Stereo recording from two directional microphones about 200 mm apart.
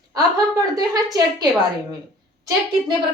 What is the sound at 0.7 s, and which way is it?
Speech, 20° right (ahead or behind).